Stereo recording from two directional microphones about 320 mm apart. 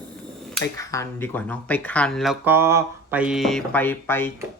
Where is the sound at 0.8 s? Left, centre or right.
Centre.